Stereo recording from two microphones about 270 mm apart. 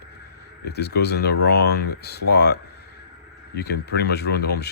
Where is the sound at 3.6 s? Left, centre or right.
Left.